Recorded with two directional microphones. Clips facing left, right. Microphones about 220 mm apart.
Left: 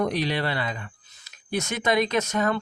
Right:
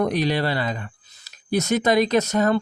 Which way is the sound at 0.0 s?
45° right (ahead or behind).